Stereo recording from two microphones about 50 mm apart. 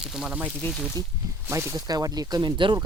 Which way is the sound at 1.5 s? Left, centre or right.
Right.